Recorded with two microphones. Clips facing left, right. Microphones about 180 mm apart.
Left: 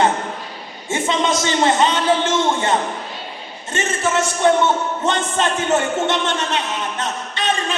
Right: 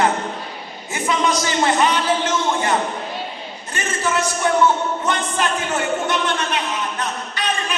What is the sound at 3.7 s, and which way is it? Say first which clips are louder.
A man's voice: left 3 dB; 25° left (ahead or behind).